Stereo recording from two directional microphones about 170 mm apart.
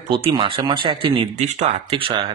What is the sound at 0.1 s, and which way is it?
Speech, 30° right (ahead or behind).